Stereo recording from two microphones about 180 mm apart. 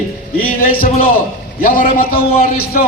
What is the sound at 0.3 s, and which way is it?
A man's voice, 55° left (ahead or behind).